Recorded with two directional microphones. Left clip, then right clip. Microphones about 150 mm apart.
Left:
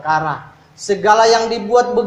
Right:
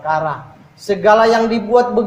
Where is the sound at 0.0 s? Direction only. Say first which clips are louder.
Left 1 dB; 35° left (ahead or behind).